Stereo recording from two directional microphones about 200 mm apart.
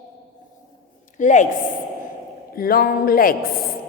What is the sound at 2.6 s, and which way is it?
Speech, 45° left (ahead or behind).